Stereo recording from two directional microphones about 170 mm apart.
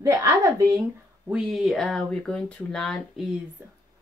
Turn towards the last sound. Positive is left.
turn(degrees=-10)  # may be behind; listen again after turning